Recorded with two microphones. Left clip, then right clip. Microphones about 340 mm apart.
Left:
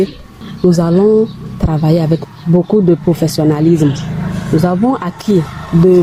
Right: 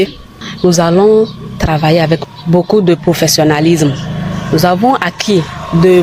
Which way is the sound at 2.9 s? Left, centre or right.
Right.